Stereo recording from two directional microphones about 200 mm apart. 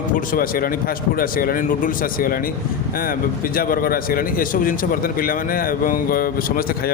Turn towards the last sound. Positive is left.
turn(degrees=45)  # may be behind; listen again after turning